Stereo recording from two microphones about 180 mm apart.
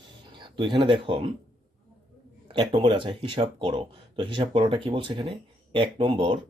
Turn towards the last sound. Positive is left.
turn(degrees=-30)  # may be behind; listen again after turning